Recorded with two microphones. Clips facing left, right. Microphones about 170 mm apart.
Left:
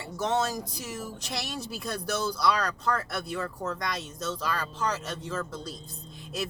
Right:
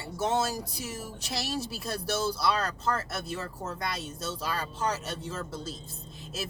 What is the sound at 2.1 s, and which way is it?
Speech, 30° right (ahead or behind).